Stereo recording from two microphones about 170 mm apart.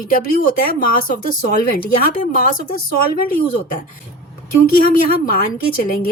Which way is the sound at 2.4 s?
55° left (ahead or behind).